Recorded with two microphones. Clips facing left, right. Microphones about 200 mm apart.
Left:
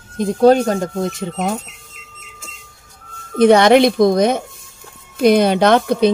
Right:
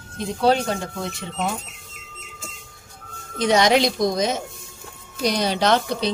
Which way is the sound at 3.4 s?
60° left (ahead or behind).